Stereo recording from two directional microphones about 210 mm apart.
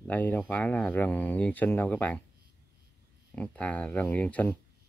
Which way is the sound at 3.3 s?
5° left (ahead or behind).